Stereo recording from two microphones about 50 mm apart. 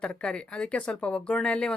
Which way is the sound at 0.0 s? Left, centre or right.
Left.